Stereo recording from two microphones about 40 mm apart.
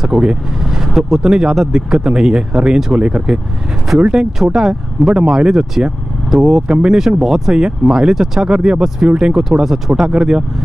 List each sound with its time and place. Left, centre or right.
0.1 s speech: centre
6.2 s speech: centre
6.7 s speech: centre